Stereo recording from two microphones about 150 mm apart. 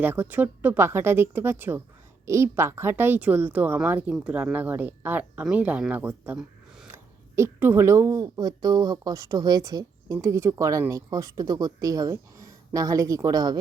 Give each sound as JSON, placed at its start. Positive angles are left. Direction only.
{"t": 0.0, "sound": "a woman's voice", "side_deg": -10}